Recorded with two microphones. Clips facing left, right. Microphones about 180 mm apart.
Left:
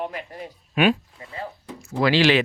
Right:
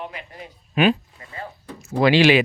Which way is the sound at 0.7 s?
Centre (ahead or behind).